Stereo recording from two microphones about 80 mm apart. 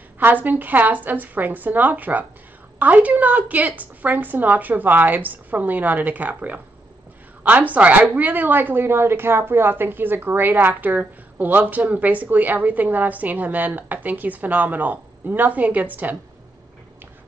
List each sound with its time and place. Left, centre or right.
0.2 s speech: right